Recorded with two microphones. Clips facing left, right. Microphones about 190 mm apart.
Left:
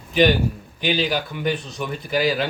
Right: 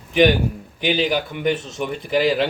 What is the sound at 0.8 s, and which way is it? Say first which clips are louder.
A man's voice: right 2 dB; 15° right (ahead or behind).